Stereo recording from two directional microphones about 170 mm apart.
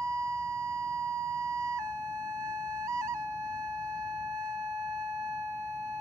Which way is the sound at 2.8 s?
20° right (ahead or behind).